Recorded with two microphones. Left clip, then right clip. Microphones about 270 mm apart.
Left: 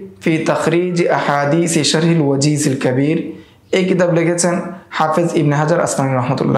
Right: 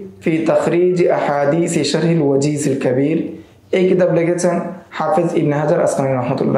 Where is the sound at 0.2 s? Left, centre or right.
Left.